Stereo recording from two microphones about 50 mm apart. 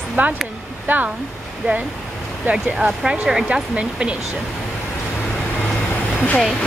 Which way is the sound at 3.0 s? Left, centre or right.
Right.